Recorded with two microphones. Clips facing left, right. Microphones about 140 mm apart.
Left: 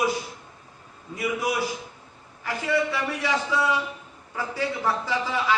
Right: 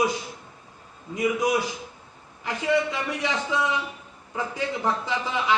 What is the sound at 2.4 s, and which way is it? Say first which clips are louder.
A man's voice: right 1 dB; 20° right (ahead or behind).